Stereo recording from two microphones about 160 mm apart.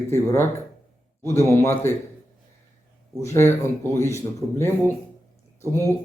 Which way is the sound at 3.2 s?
15° left (ahead or behind).